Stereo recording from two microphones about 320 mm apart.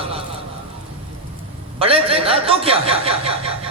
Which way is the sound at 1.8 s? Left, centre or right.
Centre.